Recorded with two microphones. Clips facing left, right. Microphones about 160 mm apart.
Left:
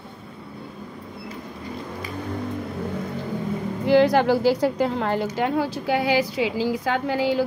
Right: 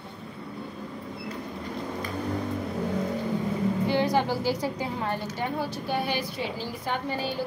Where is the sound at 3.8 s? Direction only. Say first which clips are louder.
Left 10 dB; 90° left.